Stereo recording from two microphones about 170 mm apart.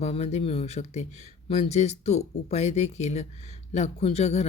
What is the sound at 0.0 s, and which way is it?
Speech, 40° left (ahead or behind).